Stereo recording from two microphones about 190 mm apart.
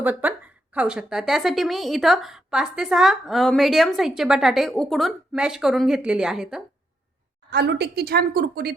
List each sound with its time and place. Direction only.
0.0 s a woman's voice: 10° right (ahead or behind)
7.5 s a woman's voice: 60° right (ahead or behind)